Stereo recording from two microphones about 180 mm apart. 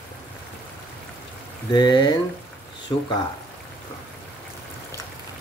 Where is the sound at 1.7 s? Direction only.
25° left (ahead or behind).